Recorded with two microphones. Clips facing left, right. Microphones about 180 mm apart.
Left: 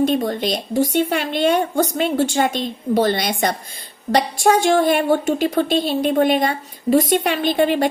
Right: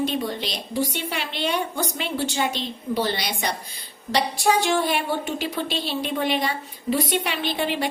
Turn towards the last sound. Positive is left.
turn(degrees=45)  # may be behind; listen again after turning